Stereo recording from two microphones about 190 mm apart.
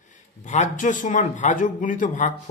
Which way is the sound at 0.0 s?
40° left (ahead or behind).